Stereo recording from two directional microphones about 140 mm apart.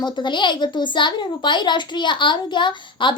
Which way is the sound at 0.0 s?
35° left (ahead or behind).